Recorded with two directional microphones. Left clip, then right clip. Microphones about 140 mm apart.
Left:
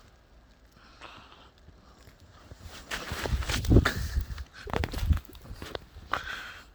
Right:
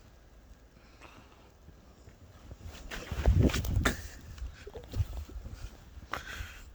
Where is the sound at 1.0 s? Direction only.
Centre (ahead or behind).